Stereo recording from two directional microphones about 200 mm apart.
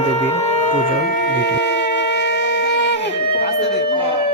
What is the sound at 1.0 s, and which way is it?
Shofar, 55° left (ahead or behind).